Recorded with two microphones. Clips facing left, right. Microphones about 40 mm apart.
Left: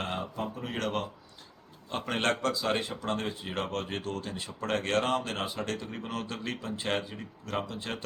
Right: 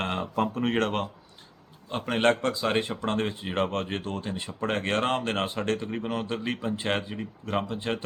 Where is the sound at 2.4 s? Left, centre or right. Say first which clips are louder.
Right 3 dB; right.